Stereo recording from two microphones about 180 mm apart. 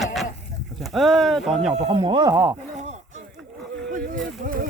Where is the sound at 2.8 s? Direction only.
40° right (ahead or behind).